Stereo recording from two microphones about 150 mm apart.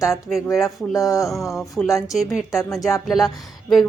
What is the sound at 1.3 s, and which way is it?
Speech, centre (ahead or behind).